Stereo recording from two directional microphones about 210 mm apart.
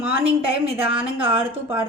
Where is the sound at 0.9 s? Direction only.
10° right (ahead or behind).